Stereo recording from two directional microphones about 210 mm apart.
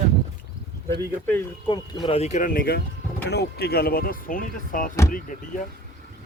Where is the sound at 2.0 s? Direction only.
30° left (ahead or behind).